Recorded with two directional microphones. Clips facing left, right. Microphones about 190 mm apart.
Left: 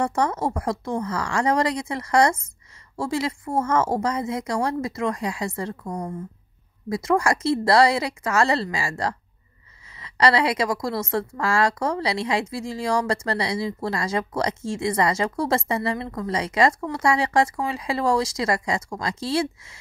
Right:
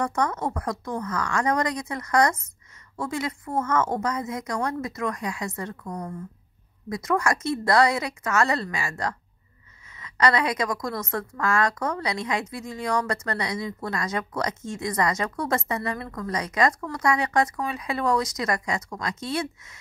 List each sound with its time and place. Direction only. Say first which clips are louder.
0.0 s a woman's voice: left 3 dB; 30° left (ahead or behind)